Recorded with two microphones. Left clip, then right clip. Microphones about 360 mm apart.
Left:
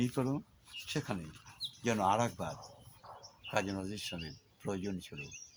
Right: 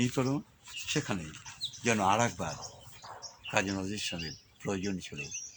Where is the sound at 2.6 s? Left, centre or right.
Left.